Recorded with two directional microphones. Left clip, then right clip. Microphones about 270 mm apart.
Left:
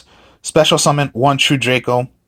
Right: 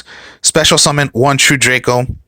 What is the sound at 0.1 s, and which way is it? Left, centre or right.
Speech, right.